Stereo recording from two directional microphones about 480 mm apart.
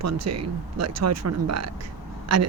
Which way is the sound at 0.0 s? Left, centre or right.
Right.